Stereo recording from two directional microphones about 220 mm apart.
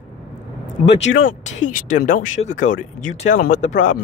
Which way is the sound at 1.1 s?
50° left (ahead or behind).